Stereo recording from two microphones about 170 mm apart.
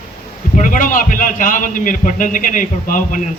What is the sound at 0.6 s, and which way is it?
A man's voice, 50° left (ahead or behind).